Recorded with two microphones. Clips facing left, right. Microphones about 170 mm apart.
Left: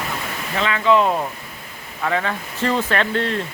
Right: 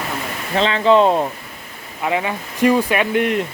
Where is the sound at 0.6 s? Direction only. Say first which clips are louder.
Right 4 dB; 30° right (ahead or behind).